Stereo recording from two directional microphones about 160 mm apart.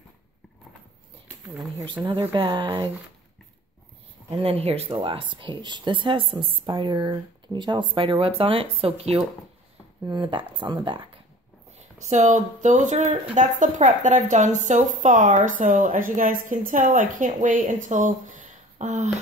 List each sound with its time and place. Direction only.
2.0 s speech: 30° right (ahead or behind)
4.3 s speech: 40° right (ahead or behind)
12.0 s a woman's voice: 50° right (ahead or behind)